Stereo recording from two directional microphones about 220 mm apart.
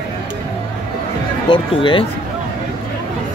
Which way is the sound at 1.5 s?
20° left (ahead or behind).